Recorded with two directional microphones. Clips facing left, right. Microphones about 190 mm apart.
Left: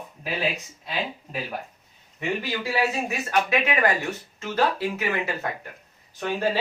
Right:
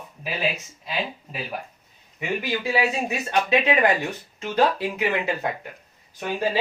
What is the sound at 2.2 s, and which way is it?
Speech, 15° right (ahead or behind).